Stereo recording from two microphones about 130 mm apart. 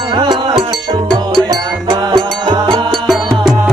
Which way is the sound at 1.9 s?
35° right (ahead or behind).